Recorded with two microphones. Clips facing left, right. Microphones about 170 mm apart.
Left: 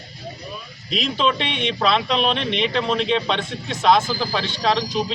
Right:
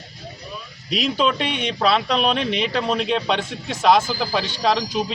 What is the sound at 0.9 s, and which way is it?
Speech, 10° right (ahead or behind).